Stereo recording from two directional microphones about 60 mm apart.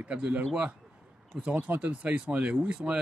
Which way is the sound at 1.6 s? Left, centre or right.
Right.